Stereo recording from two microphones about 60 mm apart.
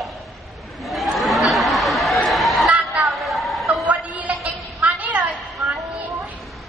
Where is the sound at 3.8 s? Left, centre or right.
Right.